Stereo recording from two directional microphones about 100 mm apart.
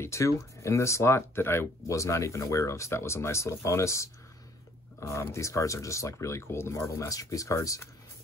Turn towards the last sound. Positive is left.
turn(degrees=35)  # may be behind; listen again after turning